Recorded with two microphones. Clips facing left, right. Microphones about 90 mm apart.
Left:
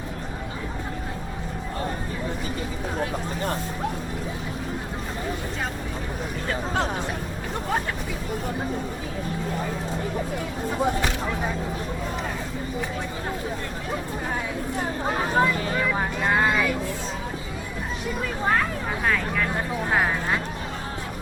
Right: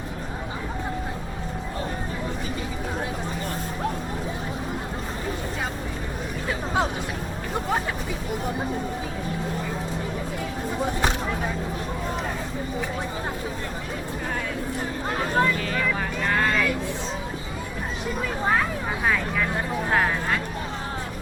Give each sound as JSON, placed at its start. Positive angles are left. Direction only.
{"t": 15.0, "sound": "a sound", "side_deg": 10}
{"t": 15.5, "sound": "vehicle", "side_deg": 25}
{"t": 19.0, "sound": "vehicle", "side_deg": -5}